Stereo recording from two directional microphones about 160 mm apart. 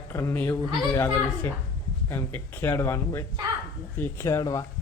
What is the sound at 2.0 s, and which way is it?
A man's voice, 15° left (ahead or behind).